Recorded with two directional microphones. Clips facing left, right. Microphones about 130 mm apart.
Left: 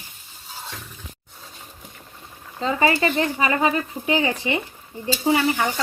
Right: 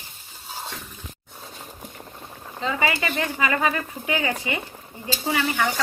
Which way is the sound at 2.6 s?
35° left (ahead or behind).